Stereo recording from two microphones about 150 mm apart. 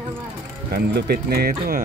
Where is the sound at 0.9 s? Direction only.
90° right.